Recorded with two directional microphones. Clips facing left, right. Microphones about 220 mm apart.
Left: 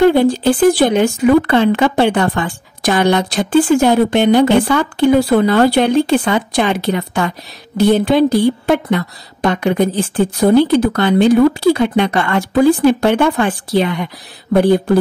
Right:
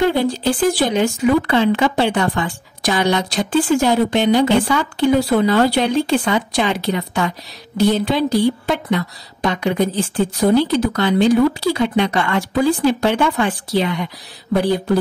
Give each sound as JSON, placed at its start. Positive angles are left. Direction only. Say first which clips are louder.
{"t": 0.0, "sound": "speech", "louder": "left 6 dB", "side_deg": 55}